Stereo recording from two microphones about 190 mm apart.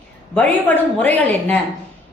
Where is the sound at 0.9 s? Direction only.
10° left (ahead or behind).